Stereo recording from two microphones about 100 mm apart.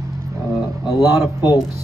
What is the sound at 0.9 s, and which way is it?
Speech, 40° left (ahead or behind).